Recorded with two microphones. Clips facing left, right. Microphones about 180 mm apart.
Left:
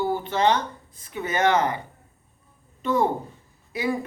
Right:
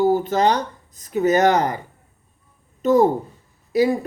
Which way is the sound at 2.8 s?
40° right (ahead or behind).